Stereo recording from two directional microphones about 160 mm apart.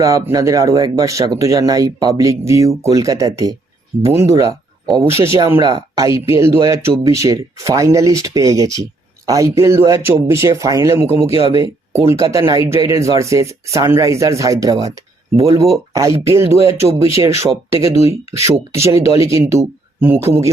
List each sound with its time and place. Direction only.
0.0 s speech: 20° right (ahead or behind)